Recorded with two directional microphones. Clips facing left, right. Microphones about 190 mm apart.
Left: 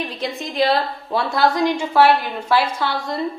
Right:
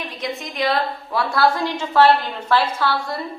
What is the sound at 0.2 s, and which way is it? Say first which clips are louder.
A woman's voice: left 3 dB; 30° left (ahead or behind).